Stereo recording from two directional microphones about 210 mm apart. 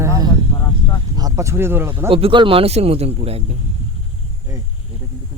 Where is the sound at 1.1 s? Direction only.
15° right (ahead or behind).